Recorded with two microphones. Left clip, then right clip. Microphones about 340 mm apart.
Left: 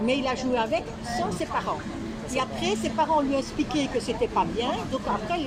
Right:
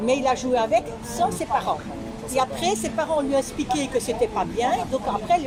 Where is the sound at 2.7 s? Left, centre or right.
Centre.